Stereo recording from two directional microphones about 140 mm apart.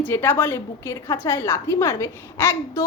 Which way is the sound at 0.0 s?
15° left (ahead or behind).